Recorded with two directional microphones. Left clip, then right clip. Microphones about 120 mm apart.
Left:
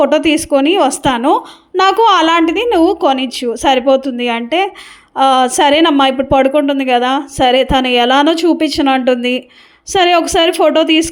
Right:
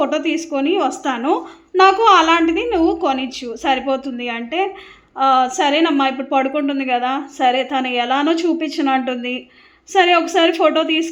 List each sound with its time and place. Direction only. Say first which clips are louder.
0.0 s a woman's voice: left 8 dB; 65° left (ahead or behind)